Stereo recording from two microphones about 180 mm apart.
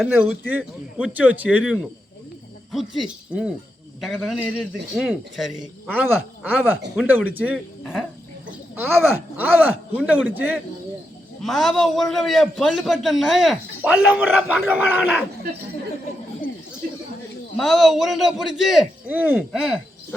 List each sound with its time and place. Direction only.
0.1 s a man's voice: 10° right (ahead or behind)
16.8 s a sound: 55° right (ahead or behind)
17.6 s a man's voice: centre (ahead or behind)